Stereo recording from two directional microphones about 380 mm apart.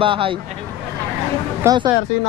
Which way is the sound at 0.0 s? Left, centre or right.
Centre.